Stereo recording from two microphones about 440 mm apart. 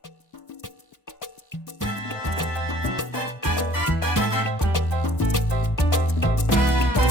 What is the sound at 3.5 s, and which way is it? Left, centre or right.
Music, left.